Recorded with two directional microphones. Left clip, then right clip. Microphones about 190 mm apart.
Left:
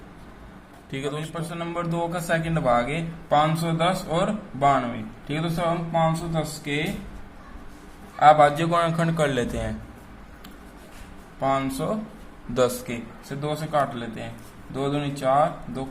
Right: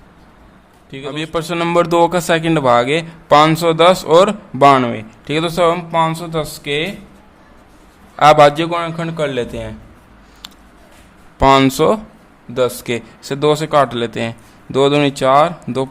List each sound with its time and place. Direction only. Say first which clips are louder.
0.9 s a man's voice: right 3 dB; 5° right (ahead or behind)
1.2 s a man's voice: right 14 dB; 50° right (ahead or behind)
8.2 s a man's voice: right 7 dB; 45° right (ahead or behind)
8.5 s a man's voice: right 4 dB; 20° right (ahead or behind)
11.3 s a man's voice: right 14 dB; 50° right (ahead or behind)